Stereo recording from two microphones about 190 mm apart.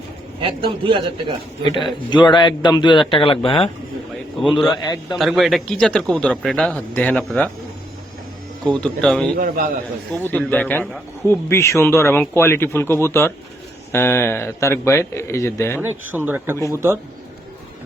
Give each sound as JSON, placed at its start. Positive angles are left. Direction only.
{"t": 0.3, "sound": "a man's voice", "side_deg": -25}
{"t": 1.6, "sound": "a man's voice", "side_deg": 25}
{"t": 4.7, "sound": "a man's voice", "side_deg": 20}
{"t": 5.1, "sound": "a man's voice", "side_deg": 0}
{"t": 8.8, "sound": "a man's voice", "side_deg": 5}
{"t": 15.8, "sound": "speech", "side_deg": -10}